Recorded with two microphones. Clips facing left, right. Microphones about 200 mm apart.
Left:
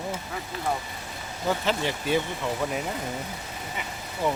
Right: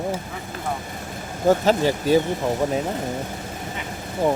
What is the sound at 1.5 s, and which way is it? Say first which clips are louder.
Speech: right 9 dB; 40° right (ahead or behind).